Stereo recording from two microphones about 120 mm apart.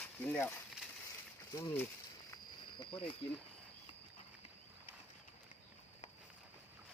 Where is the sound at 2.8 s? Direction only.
50° left (ahead or behind).